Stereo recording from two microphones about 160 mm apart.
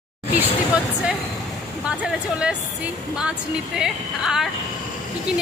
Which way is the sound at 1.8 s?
5° right (ahead or behind).